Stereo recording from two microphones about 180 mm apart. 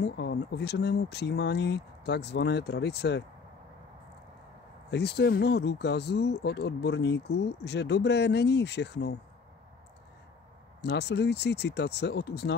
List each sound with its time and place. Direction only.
0.0 s speech: 70° left (ahead or behind)
4.9 s speech: 65° left (ahead or behind)
10.8 s speech: 70° left (ahead or behind)